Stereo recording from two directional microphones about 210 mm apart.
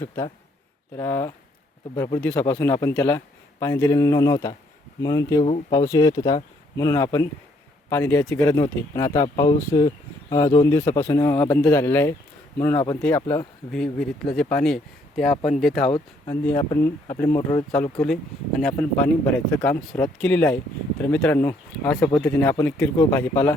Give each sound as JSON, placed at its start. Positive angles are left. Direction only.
{"t": 0.9, "sound": "speech", "side_deg": 10}
{"t": 13.7, "sound": "speech", "side_deg": 0}
{"t": 15.3, "sound": "speech", "side_deg": 30}
{"t": 15.6, "sound": "speech", "side_deg": 0}